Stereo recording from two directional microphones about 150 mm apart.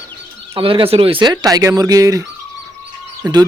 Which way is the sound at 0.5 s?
35° right (ahead or behind).